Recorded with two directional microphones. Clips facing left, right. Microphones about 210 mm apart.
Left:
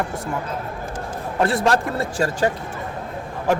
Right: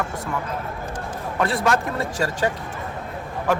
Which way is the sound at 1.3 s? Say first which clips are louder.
Left 2 dB; 30° left (ahead or behind).